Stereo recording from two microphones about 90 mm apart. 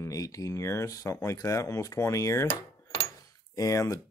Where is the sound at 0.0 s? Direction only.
40° left (ahead or behind).